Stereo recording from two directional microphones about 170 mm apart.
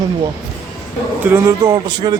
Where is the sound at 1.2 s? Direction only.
15° right (ahead or behind).